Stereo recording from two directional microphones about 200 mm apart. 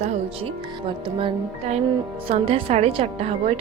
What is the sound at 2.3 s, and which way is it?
A woman's voice, 30° right (ahead or behind).